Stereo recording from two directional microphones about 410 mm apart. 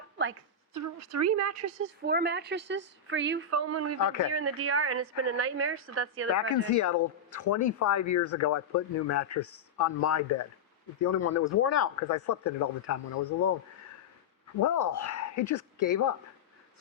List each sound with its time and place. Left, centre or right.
0.7 s a woman's voice: right
2.0 s a woman's voice: right
6.3 s speech: left
14.6 s speech: left